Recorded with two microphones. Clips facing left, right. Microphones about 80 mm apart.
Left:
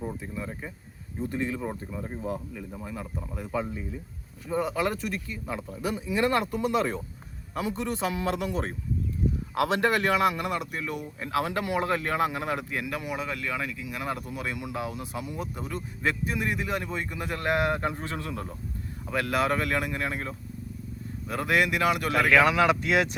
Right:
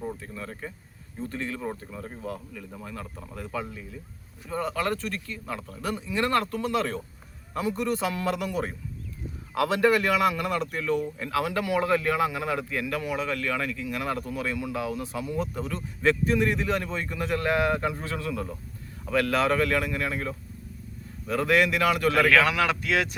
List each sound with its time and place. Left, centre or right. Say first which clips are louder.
0.2 s speech: left 1 dB; centre
11.2 s speech: right 1 dB; left
12.7 s speech: right 3 dB; centre
19.0 s speech: right 2 dB; left